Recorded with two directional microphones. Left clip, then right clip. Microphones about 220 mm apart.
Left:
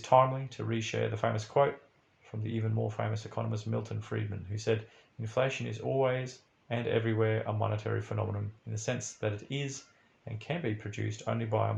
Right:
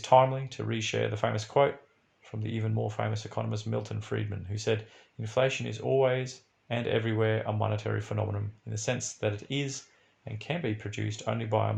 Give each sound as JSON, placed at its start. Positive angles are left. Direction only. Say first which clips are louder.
{"t": 0.0, "sound": "speech", "louder": "right 3 dB", "side_deg": -40}